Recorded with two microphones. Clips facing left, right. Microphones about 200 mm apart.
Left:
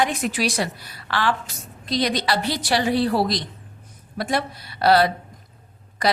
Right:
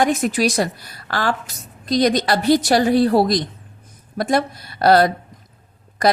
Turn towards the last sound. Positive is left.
turn(degrees=-45)  # may be behind; listen again after turning